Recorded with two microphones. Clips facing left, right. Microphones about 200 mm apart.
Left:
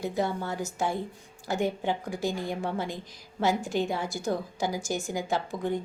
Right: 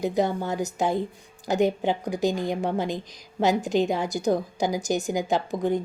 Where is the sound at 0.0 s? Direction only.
20° right (ahead or behind).